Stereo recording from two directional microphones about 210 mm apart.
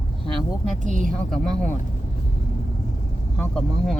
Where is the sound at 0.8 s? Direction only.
35° right (ahead or behind).